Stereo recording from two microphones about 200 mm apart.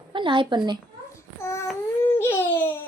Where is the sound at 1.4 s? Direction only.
15° left (ahead or behind).